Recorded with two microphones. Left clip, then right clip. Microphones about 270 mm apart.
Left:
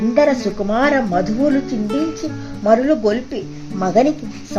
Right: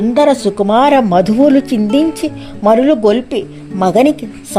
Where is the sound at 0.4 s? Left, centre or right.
Centre.